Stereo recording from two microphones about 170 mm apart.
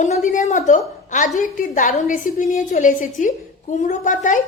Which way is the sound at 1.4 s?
50° left (ahead or behind).